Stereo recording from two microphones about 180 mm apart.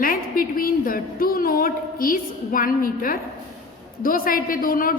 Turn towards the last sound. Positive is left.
turn(degrees=50)  # may be behind; listen again after turning